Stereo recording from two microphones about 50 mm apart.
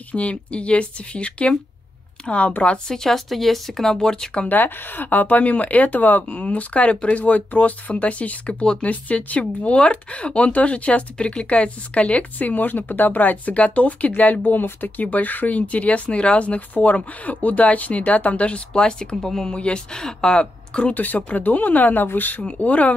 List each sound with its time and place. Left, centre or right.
0.1 s speech: left
3.0 s speech: centre
4.5 s speech: left; by 20.9 s centre
20.9 s speech: left